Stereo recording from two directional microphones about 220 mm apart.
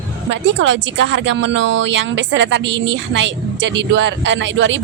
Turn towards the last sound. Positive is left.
turn(degrees=-55)  # may be behind; listen again after turning